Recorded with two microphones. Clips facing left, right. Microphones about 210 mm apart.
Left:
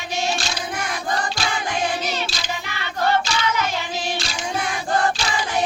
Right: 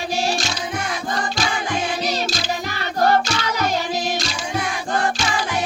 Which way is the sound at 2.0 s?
40° right (ahead or behind).